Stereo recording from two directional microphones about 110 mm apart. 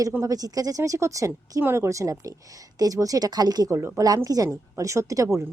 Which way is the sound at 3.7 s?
25° right (ahead or behind).